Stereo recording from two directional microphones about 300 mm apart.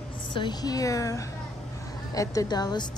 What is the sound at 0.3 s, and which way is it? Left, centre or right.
A woman's voice, centre.